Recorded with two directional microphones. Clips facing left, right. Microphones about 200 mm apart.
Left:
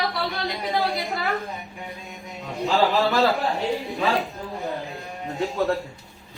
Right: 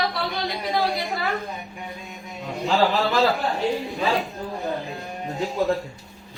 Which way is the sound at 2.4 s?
Centre (ahead or behind).